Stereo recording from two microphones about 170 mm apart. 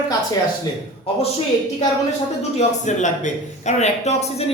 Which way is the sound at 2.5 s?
45° left (ahead or behind).